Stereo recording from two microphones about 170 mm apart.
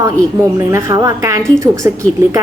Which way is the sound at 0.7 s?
20° right (ahead or behind).